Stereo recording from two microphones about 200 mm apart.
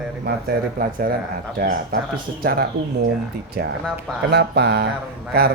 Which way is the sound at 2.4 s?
50° right (ahead or behind).